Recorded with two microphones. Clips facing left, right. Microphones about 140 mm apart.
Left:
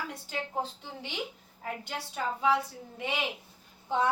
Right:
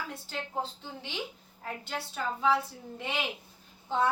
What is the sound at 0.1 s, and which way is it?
A woman's voice, 10° left (ahead or behind).